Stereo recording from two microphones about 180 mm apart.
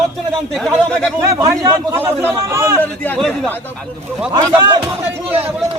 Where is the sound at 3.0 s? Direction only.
10° left (ahead or behind).